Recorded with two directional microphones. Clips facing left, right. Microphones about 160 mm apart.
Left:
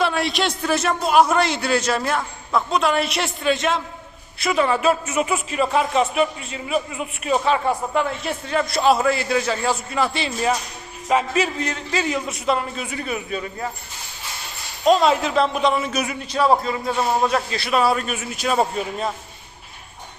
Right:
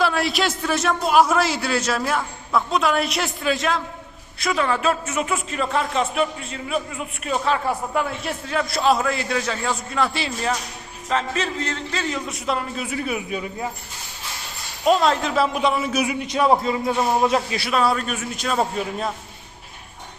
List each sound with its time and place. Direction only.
0.0 s a man's voice: centre (ahead or behind)
14.8 s a man's voice: centre (ahead or behind)
16.2 s a man's voice: 20° right (ahead or behind)
17.7 s a man's voice: 5° left (ahead or behind)